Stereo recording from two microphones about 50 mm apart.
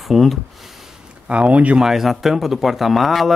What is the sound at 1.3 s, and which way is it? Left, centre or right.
Speech, right.